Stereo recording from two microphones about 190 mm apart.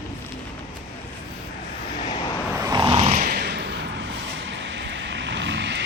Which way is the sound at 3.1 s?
50° right (ahead or behind).